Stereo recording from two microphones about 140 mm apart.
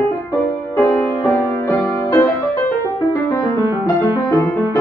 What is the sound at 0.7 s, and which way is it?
Music, 20° left (ahead or behind).